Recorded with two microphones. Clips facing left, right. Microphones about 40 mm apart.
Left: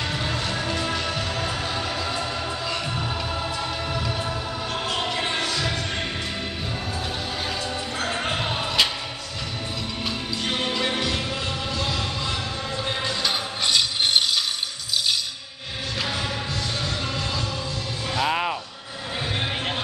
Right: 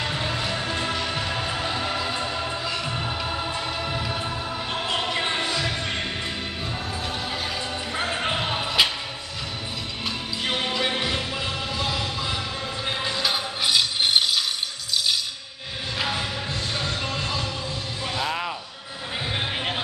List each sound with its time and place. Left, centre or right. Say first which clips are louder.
0.1 s music: even; centre
0.6 s music: left 1 dB; right
5.0 s basketball bounce: even; centre
8.0 s a sound: right 1 dB; centre
10.4 s music: right 1 dB; centre
11.0 s music: even; centre
12.8 s a sound: right 1 dB; centre
13.3 s music: right 1 dB; centre
16.0 s music: right 1 dB; centre
18.2 s music: left 5 dB; centre